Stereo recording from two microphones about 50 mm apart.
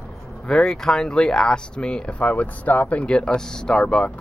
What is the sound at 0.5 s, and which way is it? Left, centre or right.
Speech, centre.